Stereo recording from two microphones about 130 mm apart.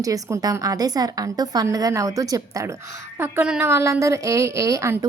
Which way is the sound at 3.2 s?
10° right (ahead or behind).